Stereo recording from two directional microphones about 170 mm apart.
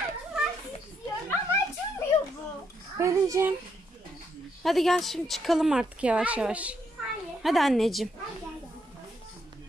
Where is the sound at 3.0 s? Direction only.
15° right (ahead or behind).